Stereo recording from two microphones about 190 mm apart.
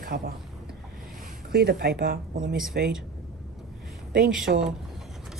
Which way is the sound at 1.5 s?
60° right (ahead or behind).